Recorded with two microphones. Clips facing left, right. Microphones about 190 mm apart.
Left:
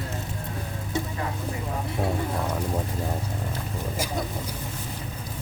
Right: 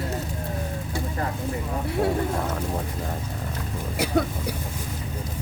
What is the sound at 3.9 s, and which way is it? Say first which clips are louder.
Speech: right 9 dB; 65° right (ahead or behind).